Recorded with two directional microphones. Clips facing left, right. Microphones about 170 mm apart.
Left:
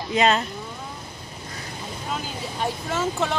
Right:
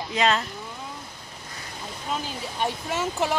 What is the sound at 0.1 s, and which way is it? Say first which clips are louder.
Speech: left 3 dB; 20° left (ahead or behind).